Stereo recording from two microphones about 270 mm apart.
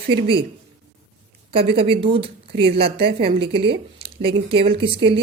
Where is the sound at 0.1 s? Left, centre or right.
Right.